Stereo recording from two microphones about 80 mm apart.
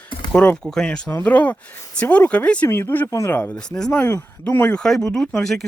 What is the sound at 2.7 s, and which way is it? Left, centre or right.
Speech, left.